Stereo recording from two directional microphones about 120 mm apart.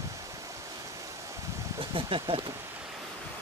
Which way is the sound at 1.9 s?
50° right (ahead or behind).